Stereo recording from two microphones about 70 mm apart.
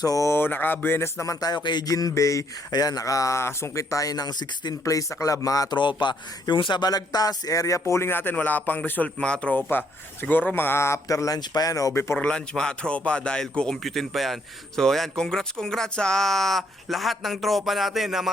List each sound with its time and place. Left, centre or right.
0.0 s speech: left
0.3 s speech: left
1.4 s speech: left
2.7 s speech: left
4.9 s speech: left; by 9.6 s centre
9.6 s speech: left
11.3 s speech: left
12.2 s speech: centre